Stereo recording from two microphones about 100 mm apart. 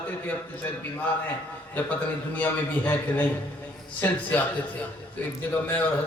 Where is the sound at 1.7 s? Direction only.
15° left (ahead or behind).